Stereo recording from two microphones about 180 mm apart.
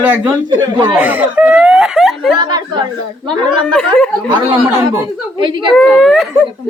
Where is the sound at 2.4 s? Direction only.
25° right (ahead or behind).